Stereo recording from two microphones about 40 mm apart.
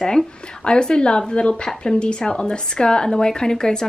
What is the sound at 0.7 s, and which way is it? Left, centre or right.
A woman's voice, left.